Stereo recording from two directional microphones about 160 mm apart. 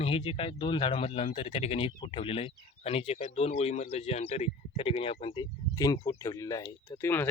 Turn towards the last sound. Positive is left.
turn(degrees=15)  # may be behind; listen again after turning